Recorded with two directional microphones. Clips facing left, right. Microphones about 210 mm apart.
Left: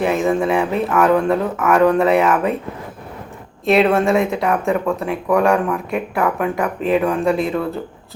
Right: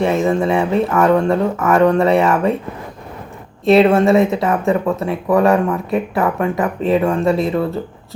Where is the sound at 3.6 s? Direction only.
Centre (ahead or behind).